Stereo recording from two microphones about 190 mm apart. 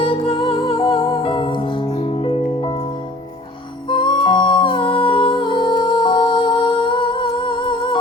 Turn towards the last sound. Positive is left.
turn(degrees=25)  # may be behind; listen again after turning